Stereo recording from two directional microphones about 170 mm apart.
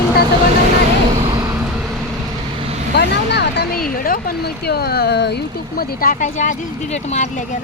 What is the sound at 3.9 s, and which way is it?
Speech, 55° left (ahead or behind).